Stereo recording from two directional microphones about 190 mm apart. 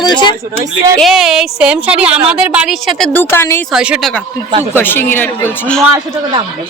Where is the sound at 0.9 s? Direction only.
Centre (ahead or behind).